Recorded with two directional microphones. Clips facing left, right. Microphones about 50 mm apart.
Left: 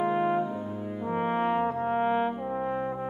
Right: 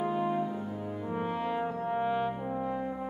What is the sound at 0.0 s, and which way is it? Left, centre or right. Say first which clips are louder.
Brass instrument: left 4 dB; left.